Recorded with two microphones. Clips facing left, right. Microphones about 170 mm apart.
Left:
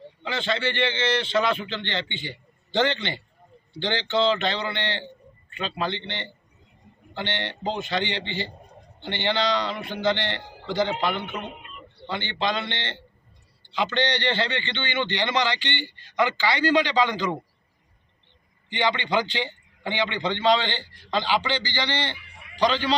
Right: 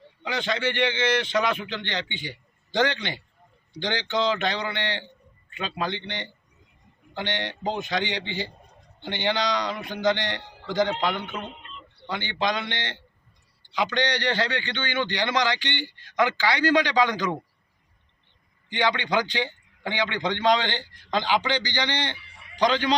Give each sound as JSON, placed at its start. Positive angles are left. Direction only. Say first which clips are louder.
{"t": 0.2, "sound": "a man's voice", "louder": "even", "side_deg": -15}
{"t": 11.1, "sound": "speech", "louder": "left 1 dB", "side_deg": 15}
{"t": 11.4, "sound": "a sound", "louder": "left 2 dB", "side_deg": 10}
{"t": 12.0, "sound": "a man's voice", "louder": "even", "side_deg": -10}
{"t": 18.8, "sound": "a man's voice", "louder": "even", "side_deg": -10}